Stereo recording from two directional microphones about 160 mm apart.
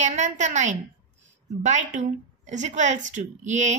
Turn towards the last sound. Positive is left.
turn(degrees=-45)  # may be behind; listen again after turning